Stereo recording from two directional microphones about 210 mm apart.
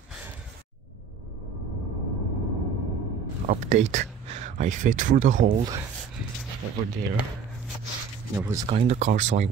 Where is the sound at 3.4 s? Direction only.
35° right (ahead or behind).